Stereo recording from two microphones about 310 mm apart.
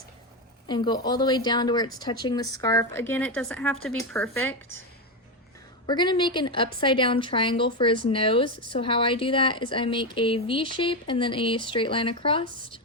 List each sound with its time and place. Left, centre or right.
0.7 s a woman's voice: centre
5.8 s speech: centre